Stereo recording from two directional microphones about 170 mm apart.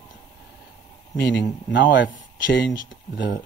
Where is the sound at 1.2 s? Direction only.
90° left.